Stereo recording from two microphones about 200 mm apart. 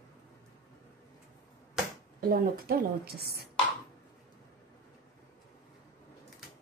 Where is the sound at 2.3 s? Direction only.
45° right (ahead or behind).